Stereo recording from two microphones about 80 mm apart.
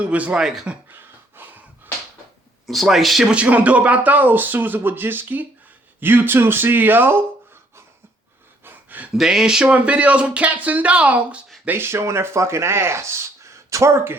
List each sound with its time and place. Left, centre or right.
0.0 s speech: centre
0.9 s a sound: right
2.6 s speech: centre
3.3 s speech: centre
8.6 s gasp: right
9.1 s speech: centre
11.6 s speech: right